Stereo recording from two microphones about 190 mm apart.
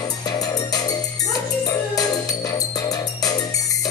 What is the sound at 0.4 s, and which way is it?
Music, 20° left (ahead or behind).